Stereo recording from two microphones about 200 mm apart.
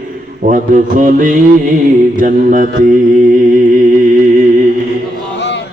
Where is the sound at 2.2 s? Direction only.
40° right (ahead or behind).